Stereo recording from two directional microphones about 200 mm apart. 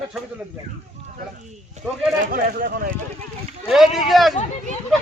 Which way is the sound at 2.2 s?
45° right (ahead or behind).